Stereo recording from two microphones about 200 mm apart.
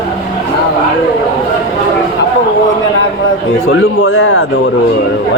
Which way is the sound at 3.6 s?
85° left.